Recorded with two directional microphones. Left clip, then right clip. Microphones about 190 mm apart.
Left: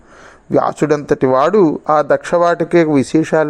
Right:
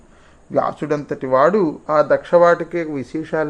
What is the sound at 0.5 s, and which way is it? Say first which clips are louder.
Speech: left 6 dB; 40° left (ahead or behind).